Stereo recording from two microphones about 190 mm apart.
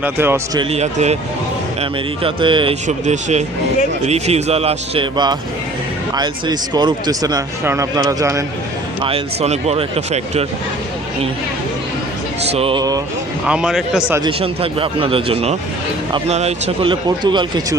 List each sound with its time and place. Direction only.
0.0 s a man's voice: 10° right (ahead or behind)
0.6 s speech: 35° right (ahead or behind)
2.8 s speech: 35° right (ahead or behind); by 8.4 s 15° right (ahead or behind)
9.0 s speech: 30° right (ahead or behind)
12.5 s speech: 30° right (ahead or behind)
13.5 s a man's voice: 5° right (ahead or behind)
14.2 s speech: 30° right (ahead or behind)